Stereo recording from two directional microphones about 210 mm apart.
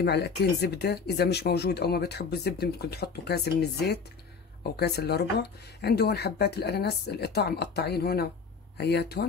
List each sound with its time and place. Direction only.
0.0 s speech: 50° left (ahead or behind)